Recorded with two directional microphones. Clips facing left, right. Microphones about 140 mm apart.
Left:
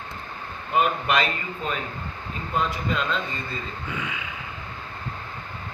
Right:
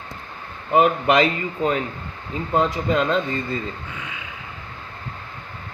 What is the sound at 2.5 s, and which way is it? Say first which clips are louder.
Speech: right 6 dB; 25° right (ahead or behind).